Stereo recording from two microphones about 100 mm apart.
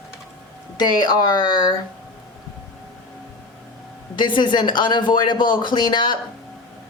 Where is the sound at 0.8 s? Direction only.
45° left (ahead or behind).